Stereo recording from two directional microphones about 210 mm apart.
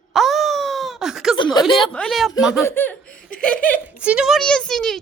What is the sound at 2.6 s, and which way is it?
Speech, 10° left (ahead or behind).